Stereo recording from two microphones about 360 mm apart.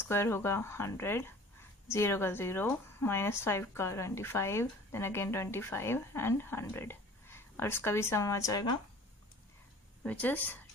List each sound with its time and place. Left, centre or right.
0.1 s speech: centre
10.0 s a woman's voice: centre